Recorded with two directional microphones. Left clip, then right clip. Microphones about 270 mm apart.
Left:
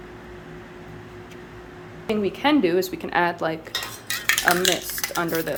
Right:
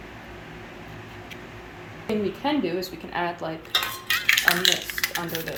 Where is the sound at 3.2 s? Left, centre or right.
Left.